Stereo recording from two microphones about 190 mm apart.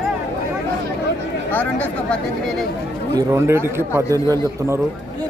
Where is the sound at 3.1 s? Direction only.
15° right (ahead or behind).